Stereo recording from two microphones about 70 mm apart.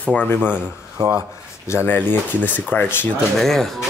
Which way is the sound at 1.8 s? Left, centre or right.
Left.